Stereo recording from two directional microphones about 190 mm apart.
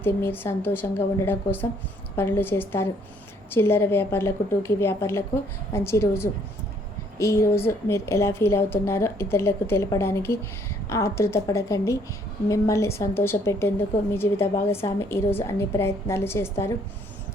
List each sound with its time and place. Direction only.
0.0 s a woman's voice: 10° left (ahead or behind)